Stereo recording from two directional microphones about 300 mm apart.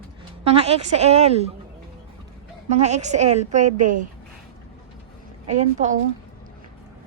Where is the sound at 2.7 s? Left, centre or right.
Right.